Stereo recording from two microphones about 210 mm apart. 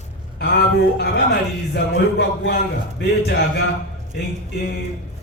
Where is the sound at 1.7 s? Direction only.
50° left (ahead or behind).